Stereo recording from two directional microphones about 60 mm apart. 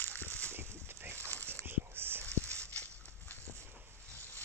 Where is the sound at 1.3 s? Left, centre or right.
Left.